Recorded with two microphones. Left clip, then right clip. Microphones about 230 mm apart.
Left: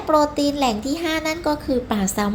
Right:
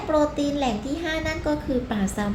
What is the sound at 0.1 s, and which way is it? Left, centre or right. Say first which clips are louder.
A child's voice: left 5 dB; left.